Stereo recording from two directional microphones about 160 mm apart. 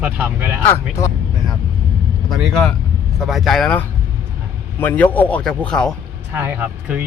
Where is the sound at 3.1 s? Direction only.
Centre (ahead or behind).